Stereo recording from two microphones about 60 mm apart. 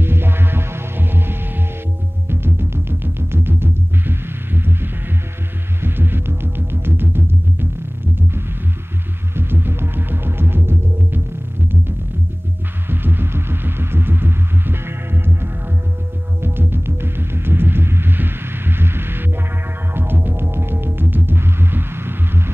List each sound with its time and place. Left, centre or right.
0.0 s music: right
5.8 s throbbing: right
9.3 s music: right
12.8 s throbbing: right
16.3 s music: right